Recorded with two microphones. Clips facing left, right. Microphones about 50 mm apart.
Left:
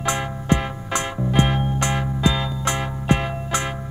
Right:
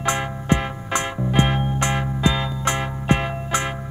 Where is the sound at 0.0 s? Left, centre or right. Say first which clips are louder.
Right 1 dB; right.